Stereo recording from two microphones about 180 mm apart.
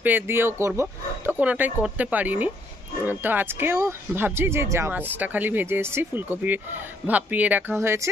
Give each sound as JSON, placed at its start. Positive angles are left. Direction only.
{"t": 0.0, "sound": "speech", "side_deg": -10}